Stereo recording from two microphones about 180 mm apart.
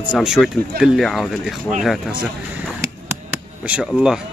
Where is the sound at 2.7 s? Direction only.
15° right (ahead or behind).